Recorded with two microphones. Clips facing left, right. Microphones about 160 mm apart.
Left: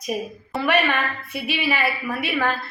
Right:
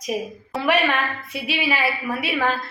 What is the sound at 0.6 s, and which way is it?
A woman's voice, 10° right (ahead or behind).